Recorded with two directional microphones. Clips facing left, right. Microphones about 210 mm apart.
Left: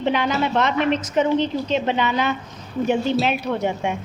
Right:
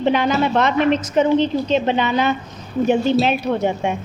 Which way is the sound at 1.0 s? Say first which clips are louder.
Right 3 dB; 30° right (ahead or behind).